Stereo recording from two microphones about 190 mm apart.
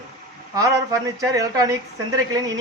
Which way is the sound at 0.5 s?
20° right (ahead or behind).